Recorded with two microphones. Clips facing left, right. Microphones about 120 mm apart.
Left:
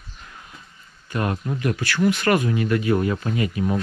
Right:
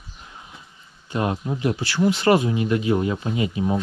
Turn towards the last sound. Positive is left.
turn(degrees=-20)  # may be behind; listen again after turning